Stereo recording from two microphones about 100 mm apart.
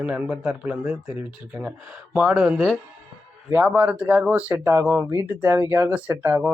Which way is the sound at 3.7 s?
15° right (ahead or behind).